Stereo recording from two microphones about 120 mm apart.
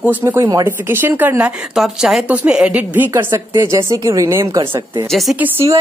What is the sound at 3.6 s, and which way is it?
Speech, 25° right (ahead or behind).